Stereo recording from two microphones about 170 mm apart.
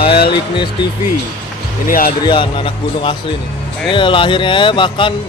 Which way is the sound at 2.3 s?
30° left (ahead or behind).